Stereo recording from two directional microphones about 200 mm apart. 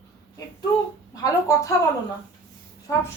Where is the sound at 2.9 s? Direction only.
15° left (ahead or behind).